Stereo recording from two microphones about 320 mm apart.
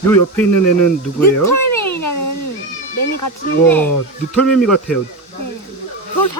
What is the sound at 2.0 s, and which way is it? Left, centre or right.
Cat, left.